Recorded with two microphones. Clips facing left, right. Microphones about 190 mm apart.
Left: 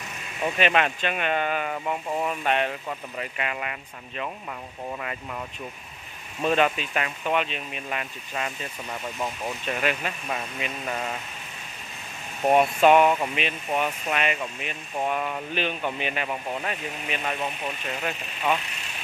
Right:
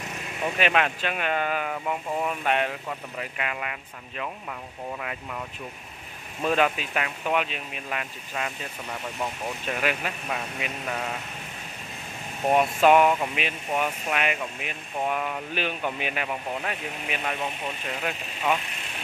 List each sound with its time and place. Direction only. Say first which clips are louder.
0.6 s speech: left 1 dB; 5° right (ahead or behind)
6.4 s speech: left 1 dB; 5° right (ahead or behind)
12.4 s speech: left 1 dB; centre (ahead or behind)